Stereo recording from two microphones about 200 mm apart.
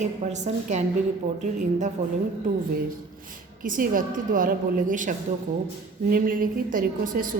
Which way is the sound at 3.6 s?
45° right (ahead or behind).